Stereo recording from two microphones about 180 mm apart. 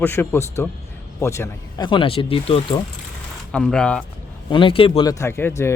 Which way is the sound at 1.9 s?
30° left (ahead or behind).